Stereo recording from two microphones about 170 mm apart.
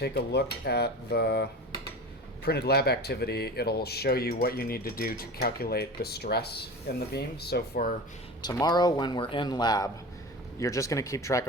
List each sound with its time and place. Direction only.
0.0 s speech: 80° left
8.4 s speech: 25° left (ahead or behind)